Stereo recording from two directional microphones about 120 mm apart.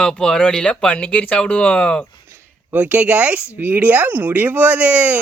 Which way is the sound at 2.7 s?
15° right (ahead or behind).